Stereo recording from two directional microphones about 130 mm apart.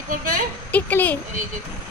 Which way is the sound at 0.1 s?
90° right.